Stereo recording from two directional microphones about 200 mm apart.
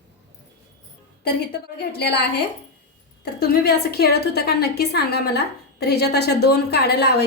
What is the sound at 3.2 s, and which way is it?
A woman's voice, 55° left (ahead or behind).